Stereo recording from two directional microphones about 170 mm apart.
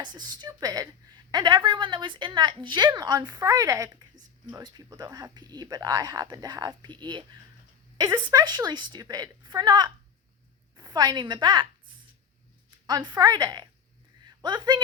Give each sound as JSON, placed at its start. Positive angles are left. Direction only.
{"t": 0.0, "sound": "a woman's voice", "side_deg": -25}
{"t": 12.9, "sound": "a woman's voice", "side_deg": -25}